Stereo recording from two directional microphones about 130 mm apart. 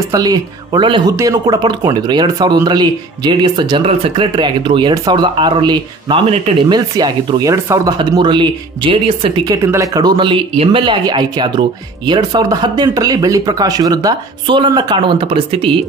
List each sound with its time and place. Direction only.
0.1 s speech: 30° right (ahead or behind)
9.5 s speech: 25° right (ahead or behind)